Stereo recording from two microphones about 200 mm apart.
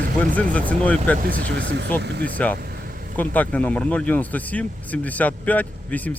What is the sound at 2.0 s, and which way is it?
Speech, 55° right (ahead or behind).